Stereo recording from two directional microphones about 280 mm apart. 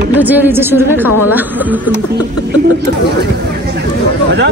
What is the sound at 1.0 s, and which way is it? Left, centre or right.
Speech, left.